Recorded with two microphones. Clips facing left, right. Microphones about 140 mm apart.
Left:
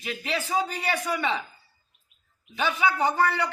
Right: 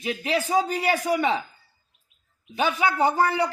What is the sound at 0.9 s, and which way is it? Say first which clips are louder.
Speech: right 5 dB; 40° right (ahead or behind).